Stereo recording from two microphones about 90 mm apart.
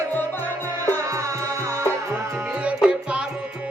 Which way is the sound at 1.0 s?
40° right (ahead or behind).